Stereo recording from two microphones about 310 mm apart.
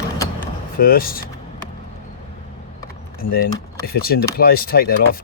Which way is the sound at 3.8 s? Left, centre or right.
Left.